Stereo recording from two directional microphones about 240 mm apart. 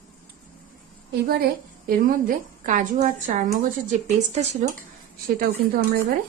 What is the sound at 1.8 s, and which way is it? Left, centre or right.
A woman's voice, right.